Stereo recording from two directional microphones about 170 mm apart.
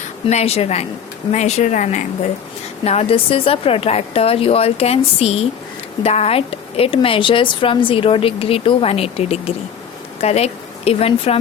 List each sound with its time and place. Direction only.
0.3 s a woman's voice: 40° left (ahead or behind)